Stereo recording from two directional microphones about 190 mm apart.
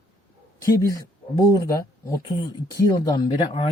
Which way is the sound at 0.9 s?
20° left (ahead or behind).